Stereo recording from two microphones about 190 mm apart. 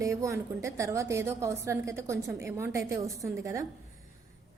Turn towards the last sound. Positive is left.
turn(degrees=-15)  # may be behind; listen again after turning